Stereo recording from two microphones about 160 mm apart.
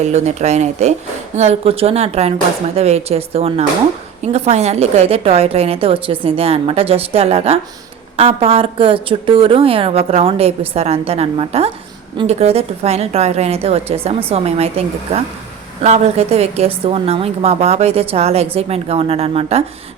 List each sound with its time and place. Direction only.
0.0 s a woman's voice: 45° right (ahead or behind)